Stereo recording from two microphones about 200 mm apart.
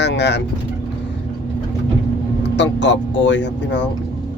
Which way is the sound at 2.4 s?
65° left (ahead or behind).